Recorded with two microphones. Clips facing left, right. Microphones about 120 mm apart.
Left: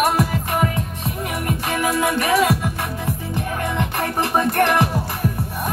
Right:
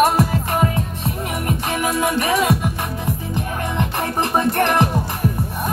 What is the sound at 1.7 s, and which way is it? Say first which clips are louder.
Music: left 1 dB; 20° right (ahead or behind).